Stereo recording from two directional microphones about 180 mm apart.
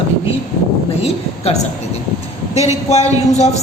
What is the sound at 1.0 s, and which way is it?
A woman's voice, 35° left (ahead or behind).